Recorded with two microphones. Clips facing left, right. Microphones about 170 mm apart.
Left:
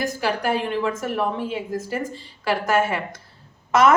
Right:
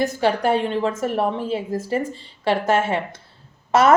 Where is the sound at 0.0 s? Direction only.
30° right (ahead or behind).